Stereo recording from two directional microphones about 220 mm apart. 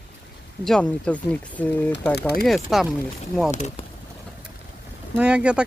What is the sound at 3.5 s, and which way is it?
Speech, 30° left (ahead or behind).